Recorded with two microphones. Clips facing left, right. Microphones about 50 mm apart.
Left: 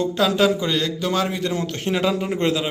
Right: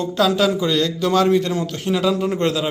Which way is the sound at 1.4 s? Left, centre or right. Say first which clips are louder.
Right 1 dB; left.